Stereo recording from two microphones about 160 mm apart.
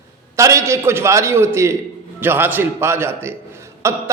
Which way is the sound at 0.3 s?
20° right (ahead or behind).